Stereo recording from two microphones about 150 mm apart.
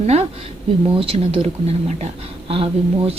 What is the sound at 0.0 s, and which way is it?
A woman's voice, 45° right (ahead or behind).